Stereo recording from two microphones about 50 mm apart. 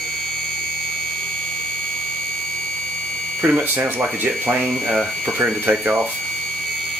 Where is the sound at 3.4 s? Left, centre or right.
Right.